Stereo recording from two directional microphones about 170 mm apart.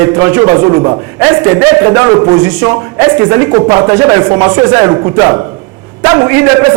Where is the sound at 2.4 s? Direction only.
5° right (ahead or behind).